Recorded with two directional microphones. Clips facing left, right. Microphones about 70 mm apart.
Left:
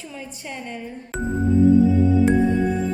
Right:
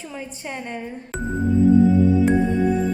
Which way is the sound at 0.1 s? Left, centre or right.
Right.